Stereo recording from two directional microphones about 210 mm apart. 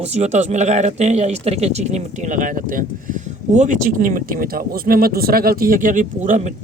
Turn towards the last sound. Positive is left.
turn(degrees=-35)  # may be behind; listen again after turning